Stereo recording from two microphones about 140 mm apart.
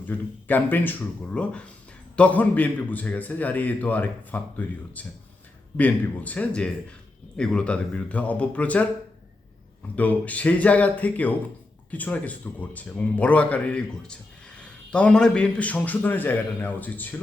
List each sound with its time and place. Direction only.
0.0 s a man's voice: 15° left (ahead or behind)
9.9 s a man's voice: 10° left (ahead or behind)